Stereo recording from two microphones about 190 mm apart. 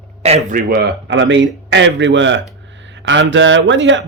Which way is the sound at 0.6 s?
55° right (ahead or behind).